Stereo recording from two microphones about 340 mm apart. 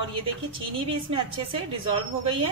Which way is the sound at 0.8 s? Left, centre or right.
Centre.